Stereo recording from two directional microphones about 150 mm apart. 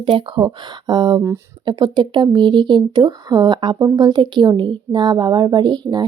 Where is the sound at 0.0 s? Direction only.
35° right (ahead or behind).